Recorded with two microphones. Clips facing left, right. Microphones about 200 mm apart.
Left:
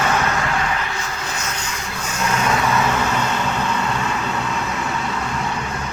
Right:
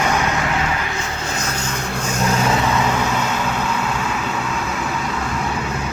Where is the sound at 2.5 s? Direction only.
15° right (ahead or behind).